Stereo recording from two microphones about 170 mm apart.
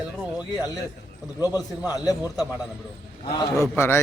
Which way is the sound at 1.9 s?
20° left (ahead or behind).